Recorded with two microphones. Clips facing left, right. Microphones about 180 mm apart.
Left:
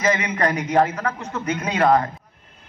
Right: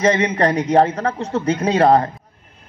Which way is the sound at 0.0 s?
30° right (ahead or behind).